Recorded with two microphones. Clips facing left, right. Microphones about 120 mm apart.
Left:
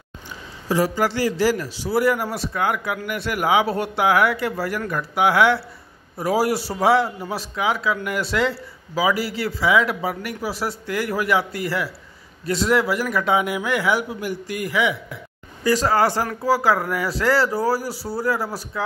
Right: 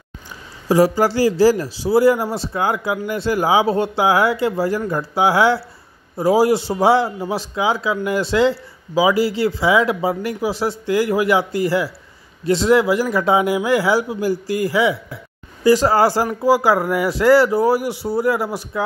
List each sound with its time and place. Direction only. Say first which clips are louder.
0.7 s a man's voice: right 6 dB; 35° right (ahead or behind)